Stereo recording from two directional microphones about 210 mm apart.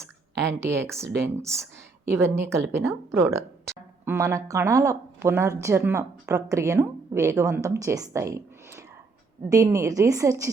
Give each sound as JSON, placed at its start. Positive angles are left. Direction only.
{"t": 0.4, "sound": "speech", "side_deg": -10}